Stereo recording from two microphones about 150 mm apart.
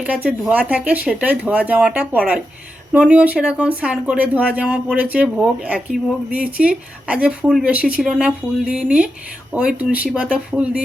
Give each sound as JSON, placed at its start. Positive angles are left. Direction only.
{"t": 0.0, "sound": "speech", "side_deg": -10}